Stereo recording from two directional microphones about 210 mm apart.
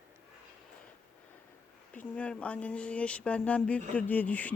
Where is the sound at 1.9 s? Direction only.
5° left (ahead or behind).